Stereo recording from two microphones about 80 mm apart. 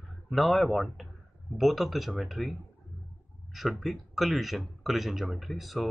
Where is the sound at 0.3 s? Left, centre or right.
Centre.